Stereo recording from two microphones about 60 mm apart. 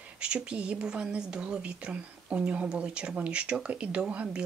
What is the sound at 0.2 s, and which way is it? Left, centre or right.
Speech, centre.